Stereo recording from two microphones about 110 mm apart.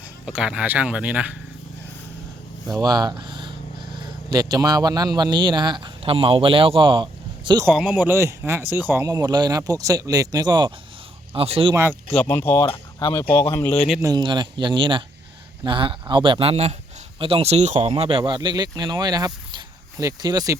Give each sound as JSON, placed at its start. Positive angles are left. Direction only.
{"t": 0.3, "sound": "speech", "side_deg": -10}
{"t": 2.7, "sound": "a man's voice", "side_deg": -35}
{"t": 7.7, "sound": "speech", "side_deg": -5}
{"t": 7.9, "sound": "speech", "side_deg": -20}
{"t": 9.0, "sound": "speech", "side_deg": -35}
{"t": 11.3, "sound": "speech", "side_deg": -60}
{"t": 11.7, "sound": "speech", "side_deg": -20}
{"t": 12.1, "sound": "speech", "side_deg": 20}
{"t": 13.0, "sound": "speech", "side_deg": 40}
{"t": 14.0, "sound": "a man's voice", "side_deg": -40}
{"t": 17.2, "sound": "speech", "side_deg": -55}
{"t": 17.7, "sound": "speech", "side_deg": -55}